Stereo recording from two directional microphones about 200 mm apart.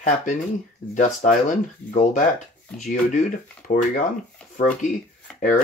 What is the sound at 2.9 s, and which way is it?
Speech, 40° left (ahead or behind).